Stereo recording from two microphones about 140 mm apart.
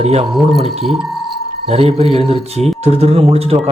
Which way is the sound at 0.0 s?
50° right (ahead or behind).